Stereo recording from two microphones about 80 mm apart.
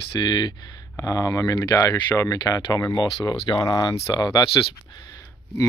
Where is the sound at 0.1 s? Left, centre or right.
Left.